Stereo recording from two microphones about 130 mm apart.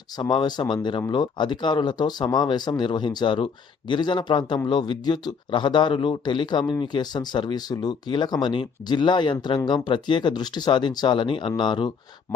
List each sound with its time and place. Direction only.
0.2 s speech: 35° left (ahead or behind)